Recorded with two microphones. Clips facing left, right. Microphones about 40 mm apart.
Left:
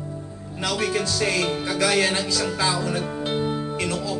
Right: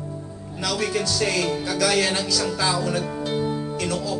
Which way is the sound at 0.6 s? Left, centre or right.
Left.